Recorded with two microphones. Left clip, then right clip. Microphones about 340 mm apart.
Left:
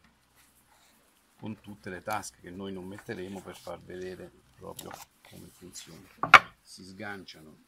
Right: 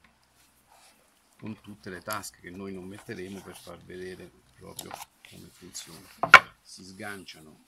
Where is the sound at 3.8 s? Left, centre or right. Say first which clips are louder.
Even; left.